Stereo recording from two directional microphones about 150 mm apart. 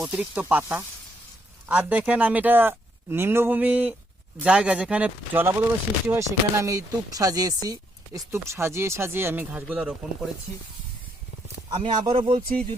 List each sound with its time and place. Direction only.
0.0 s speech: 10° right (ahead or behind)
11.7 s speech: 50° right (ahead or behind)
12.0 s speech: 35° right (ahead or behind)